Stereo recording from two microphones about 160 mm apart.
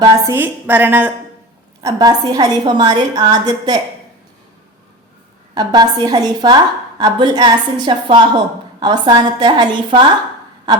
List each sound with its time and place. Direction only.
0.0 s a woman's voice: 20° right (ahead or behind)
1.8 s a woman's voice: 20° right (ahead or behind)
5.5 s a woman's voice: 25° right (ahead or behind)
10.7 s a sound: 25° right (ahead or behind)